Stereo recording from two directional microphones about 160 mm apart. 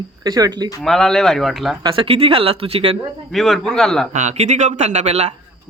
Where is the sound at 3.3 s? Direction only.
Centre (ahead or behind).